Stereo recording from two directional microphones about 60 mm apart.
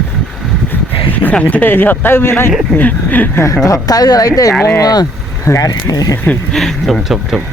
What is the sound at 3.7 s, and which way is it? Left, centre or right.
A woman's voice, left.